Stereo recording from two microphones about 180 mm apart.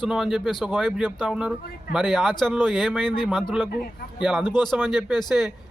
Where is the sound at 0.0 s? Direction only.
Centre (ahead or behind).